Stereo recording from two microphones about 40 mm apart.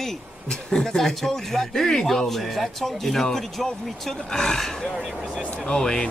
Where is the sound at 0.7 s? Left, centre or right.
Centre.